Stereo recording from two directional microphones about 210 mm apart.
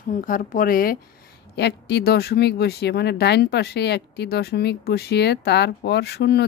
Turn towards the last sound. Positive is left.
turn(degrees=50)  # may be behind; listen again after turning